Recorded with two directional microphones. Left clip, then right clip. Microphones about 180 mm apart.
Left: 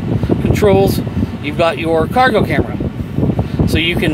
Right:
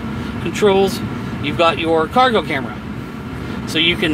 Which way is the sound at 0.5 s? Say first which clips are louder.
Left 2 dB; 40° left (ahead or behind).